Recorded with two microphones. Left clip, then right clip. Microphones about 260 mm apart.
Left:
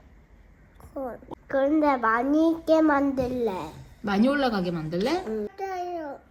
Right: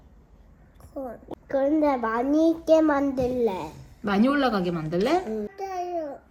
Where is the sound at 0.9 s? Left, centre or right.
Centre.